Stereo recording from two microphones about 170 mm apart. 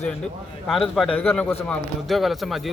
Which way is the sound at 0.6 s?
Centre (ahead or behind).